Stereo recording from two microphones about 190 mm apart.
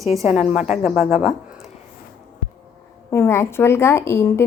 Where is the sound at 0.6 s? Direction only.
35° left (ahead or behind).